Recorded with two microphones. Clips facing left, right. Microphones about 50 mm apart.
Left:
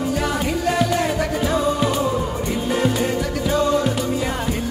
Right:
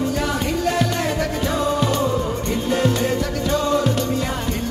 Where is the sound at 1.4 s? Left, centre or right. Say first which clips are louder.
Left 1 dB; centre.